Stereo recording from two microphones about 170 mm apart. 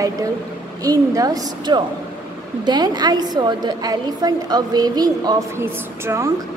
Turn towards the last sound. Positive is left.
turn(degrees=-15)  # may be behind; listen again after turning